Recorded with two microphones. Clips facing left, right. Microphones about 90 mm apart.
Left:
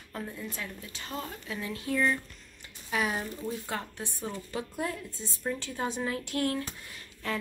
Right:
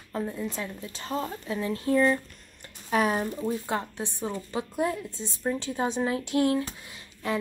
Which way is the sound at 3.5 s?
25° right (ahead or behind).